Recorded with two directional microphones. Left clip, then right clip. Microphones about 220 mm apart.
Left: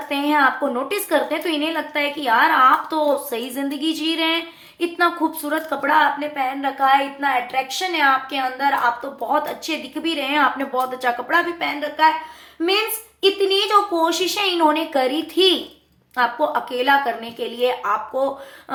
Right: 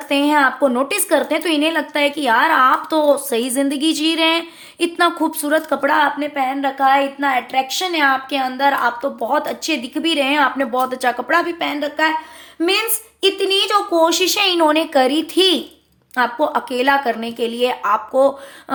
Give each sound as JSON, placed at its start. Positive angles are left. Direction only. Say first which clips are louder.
{"t": 0.1, "sound": "a woman's voice", "louder": "right 3 dB", "side_deg": -45}